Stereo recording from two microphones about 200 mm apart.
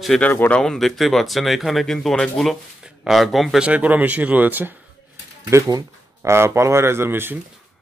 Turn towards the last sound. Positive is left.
turn(degrees=-10)  # may be behind; listen again after turning